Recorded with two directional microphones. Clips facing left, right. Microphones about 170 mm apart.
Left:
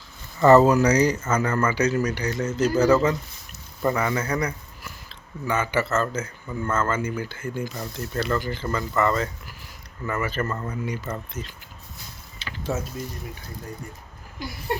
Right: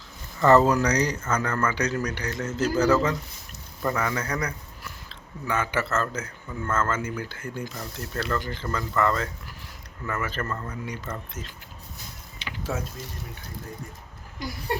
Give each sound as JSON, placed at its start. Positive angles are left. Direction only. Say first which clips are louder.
{"t": 0.4, "sound": "speech", "louder": "left 4 dB", "side_deg": 10}
{"t": 12.4, "sound": "mechanisms", "louder": "even", "side_deg": -15}